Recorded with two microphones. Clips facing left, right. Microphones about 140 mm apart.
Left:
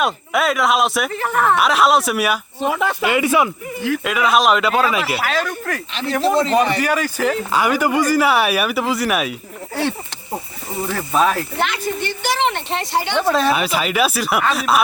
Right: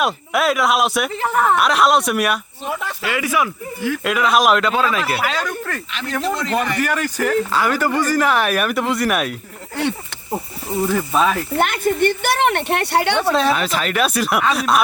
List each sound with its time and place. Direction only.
0.0 s speech: centre (ahead or behind)
2.6 s speech: 90° left
3.0 s speech: 25° left (ahead or behind)
4.0 s speech: centre (ahead or behind)
6.2 s speech: 30° left (ahead or behind)
6.8 s speech: 10° left (ahead or behind)
10.9 s speech: 5° left (ahead or behind)
11.6 s speech: 55° right (ahead or behind); by 13.1 s 70° right (ahead or behind)
13.2 s speech: centre (ahead or behind)